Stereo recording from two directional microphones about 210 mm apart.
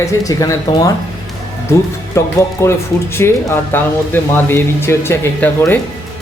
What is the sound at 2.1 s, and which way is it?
Speech, 15° left (ahead or behind).